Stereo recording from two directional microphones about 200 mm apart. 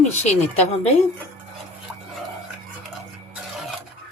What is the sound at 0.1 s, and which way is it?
Speech, 35° left (ahead or behind).